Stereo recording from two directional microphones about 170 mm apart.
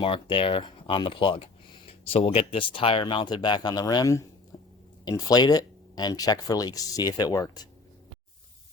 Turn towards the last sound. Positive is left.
turn(degrees=20)  # may be behind; listen again after turning